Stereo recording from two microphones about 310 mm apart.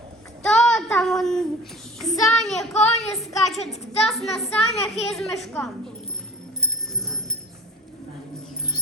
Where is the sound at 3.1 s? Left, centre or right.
Centre.